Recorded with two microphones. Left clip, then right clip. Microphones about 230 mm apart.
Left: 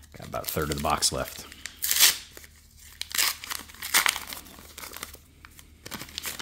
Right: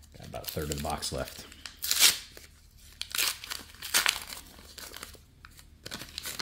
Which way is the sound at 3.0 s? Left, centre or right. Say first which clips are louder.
Left 4 dB; centre.